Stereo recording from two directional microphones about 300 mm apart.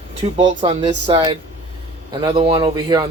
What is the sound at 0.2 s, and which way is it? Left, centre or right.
Speech, centre.